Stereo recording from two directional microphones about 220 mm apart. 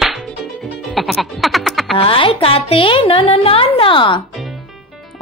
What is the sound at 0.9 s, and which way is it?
Speech, centre (ahead or behind).